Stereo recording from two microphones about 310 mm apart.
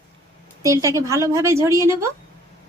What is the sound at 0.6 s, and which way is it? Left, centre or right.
Speech, centre.